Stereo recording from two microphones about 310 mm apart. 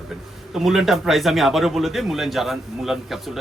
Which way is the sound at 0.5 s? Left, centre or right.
Centre.